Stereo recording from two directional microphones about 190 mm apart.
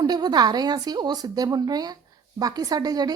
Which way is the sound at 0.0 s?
20° right (ahead or behind).